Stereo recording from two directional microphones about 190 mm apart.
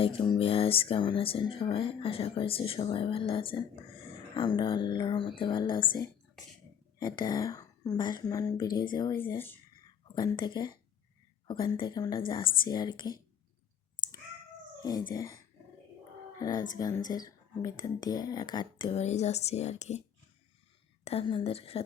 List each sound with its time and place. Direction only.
0.0 s speech: 30° left (ahead or behind)
9.2 s speech: 10° left (ahead or behind)
9.8 s a sound: 25° left (ahead or behind)
11.4 s speech: 25° left (ahead or behind)
14.8 s speech: 20° left (ahead or behind)
16.4 s speech: 20° left (ahead or behind); by 20.0 s 35° left (ahead or behind)
21.0 s a woman's voice: 30° left (ahead or behind)